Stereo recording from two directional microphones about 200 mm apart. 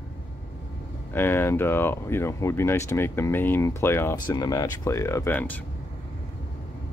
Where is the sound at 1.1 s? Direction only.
10° left (ahead or behind).